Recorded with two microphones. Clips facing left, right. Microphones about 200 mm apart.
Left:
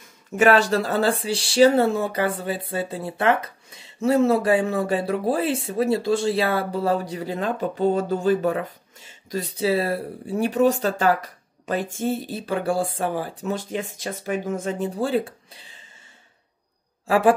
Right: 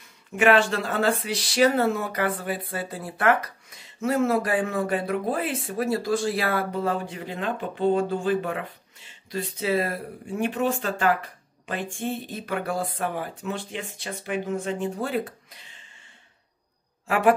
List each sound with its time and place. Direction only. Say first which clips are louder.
0.4 s speech: left 3 dB; 40° left (ahead or behind)